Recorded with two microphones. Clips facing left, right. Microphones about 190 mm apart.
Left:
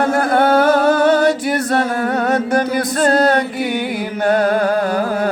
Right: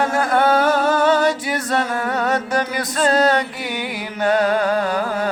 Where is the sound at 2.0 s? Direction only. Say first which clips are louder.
Left 4 dB; 55° left (ahead or behind).